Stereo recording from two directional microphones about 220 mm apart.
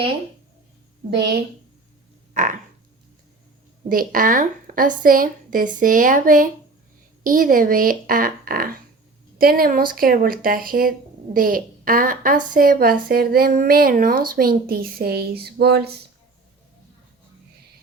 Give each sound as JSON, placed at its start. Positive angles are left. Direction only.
{"t": 1.1, "sound": "speech", "side_deg": -50}
{"t": 2.3, "sound": "frog", "side_deg": -35}
{"t": 3.8, "sound": "a woman's voice", "side_deg": -40}